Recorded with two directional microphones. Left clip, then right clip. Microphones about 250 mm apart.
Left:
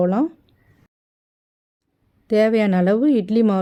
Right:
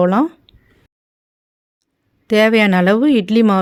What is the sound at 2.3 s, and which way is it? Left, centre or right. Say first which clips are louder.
A woman's voice: right 5 dB; centre.